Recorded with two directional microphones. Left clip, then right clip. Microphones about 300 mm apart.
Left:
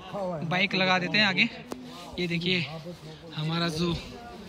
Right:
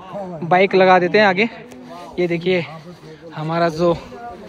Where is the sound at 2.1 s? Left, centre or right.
Centre.